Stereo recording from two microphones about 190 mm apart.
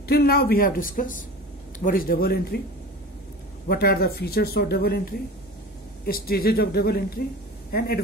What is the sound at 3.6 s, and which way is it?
Speech, 55° left (ahead or behind).